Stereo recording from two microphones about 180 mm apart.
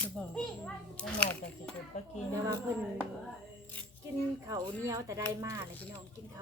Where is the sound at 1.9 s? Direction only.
40° left (ahead or behind).